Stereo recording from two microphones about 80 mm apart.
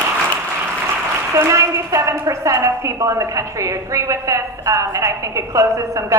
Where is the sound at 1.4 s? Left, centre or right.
Right.